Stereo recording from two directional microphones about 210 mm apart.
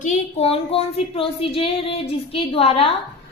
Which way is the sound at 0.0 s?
30° left (ahead or behind).